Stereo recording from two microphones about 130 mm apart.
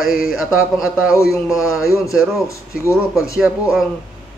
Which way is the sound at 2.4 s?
20° left (ahead or behind).